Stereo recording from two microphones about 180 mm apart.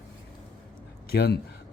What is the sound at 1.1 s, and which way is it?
Mantra, 65° left (ahead or behind).